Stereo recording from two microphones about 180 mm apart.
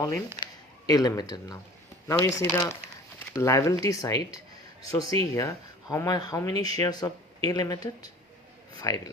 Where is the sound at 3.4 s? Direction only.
15° left (ahead or behind).